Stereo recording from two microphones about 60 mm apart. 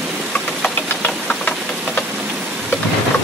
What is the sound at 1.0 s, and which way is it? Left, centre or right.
Engine knocking, left.